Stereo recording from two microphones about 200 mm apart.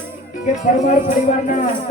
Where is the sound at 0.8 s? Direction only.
40° left (ahead or behind).